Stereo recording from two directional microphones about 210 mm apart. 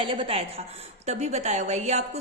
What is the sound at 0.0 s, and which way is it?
A woman's voice, 25° right (ahead or behind).